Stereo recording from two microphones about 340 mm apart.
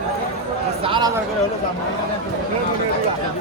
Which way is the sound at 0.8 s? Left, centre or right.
Centre.